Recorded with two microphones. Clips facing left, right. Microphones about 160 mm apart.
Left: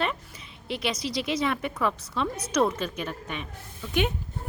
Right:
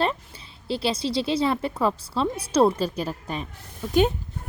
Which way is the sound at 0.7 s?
30° right (ahead or behind).